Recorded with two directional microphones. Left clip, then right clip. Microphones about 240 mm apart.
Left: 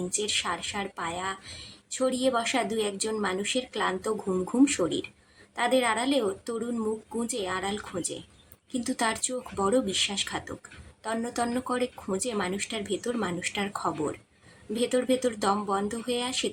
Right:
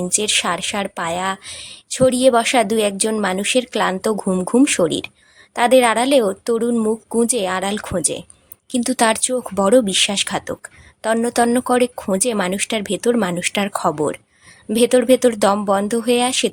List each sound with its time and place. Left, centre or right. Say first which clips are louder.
0.1 s a woman's voice: right 11 dB; right